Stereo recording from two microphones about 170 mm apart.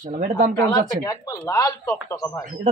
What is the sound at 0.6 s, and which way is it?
Speech, 15° left (ahead or behind).